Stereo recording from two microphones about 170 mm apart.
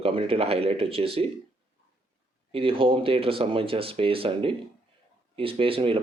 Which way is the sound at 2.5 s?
30° right (ahead or behind).